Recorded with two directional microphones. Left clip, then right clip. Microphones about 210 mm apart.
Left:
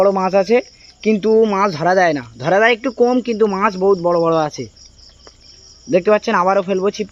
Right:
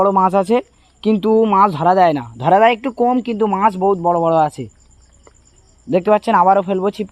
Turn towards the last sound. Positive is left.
turn(degrees=-35)  # may be behind; listen again after turning